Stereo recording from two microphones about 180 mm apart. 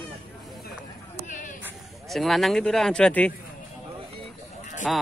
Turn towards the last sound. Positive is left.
turn(degrees=0)  # may be behind; listen again after turning